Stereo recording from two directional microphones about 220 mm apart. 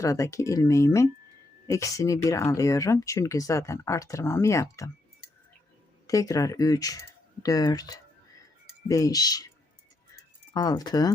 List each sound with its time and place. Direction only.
0.0 s speech: 15° left (ahead or behind)
6.1 s speech: 15° left (ahead or behind)
10.5 s speech: 15° left (ahead or behind)